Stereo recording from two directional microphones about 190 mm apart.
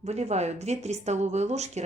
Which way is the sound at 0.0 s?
35° right (ahead or behind).